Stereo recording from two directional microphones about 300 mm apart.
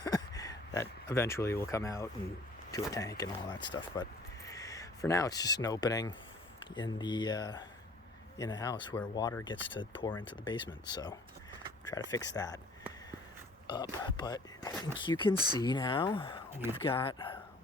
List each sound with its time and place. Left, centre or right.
0.0 s a sound: centre
2.7 s speech: centre
13.7 s speech: centre
15.4 s speech: centre
15.6 s speech: centre